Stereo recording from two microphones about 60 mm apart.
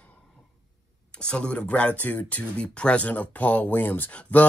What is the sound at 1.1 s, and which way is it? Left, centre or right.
A man's voice, centre.